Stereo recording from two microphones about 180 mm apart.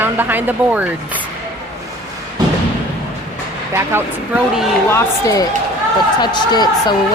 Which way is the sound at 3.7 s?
15° right (ahead or behind).